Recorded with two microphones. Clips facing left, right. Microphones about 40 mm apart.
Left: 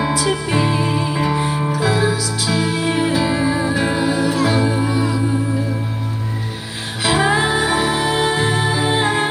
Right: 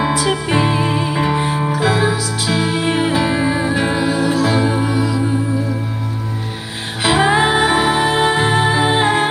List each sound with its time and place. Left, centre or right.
0.1 s music: right; by 5.0 s centre
7.0 s music: right